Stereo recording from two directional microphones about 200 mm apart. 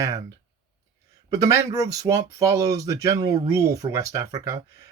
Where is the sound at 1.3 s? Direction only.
15° right (ahead or behind).